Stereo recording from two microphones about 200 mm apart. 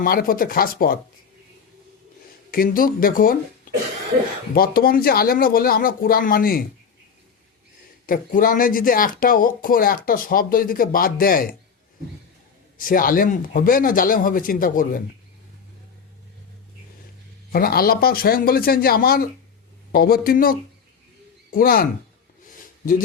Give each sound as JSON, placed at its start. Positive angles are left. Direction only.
{"t": 0.0, "sound": "speech", "side_deg": 45}
{"t": 2.5, "sound": "speech", "side_deg": 45}
{"t": 4.5, "sound": "speech", "side_deg": 50}
{"t": 8.0, "sound": "speech", "side_deg": 45}
{"t": 12.7, "sound": "speech", "side_deg": 45}
{"t": 17.5, "sound": "speech", "side_deg": 45}
{"t": 22.4, "sound": "gasp", "side_deg": 40}